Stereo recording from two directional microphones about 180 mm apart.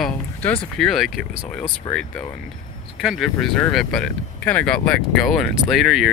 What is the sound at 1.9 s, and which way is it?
Speech, 25° left (ahead or behind).